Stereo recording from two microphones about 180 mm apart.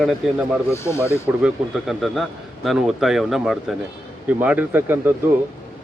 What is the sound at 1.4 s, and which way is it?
Speech, centre (ahead or behind).